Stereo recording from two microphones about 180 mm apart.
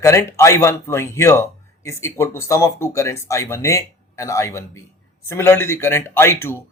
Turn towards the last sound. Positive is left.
turn(degrees=15)  # may be behind; listen again after turning